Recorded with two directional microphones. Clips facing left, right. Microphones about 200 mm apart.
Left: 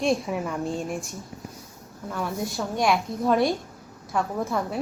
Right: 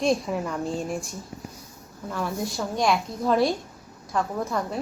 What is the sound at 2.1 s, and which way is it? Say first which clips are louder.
A woman's voice: even; centre (ahead or behind).